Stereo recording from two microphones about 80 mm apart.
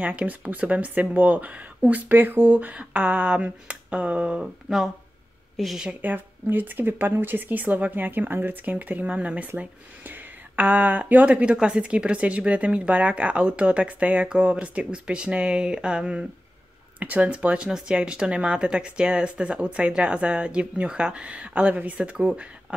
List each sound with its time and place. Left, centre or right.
0.0 s speech: centre
5.9 s speech: right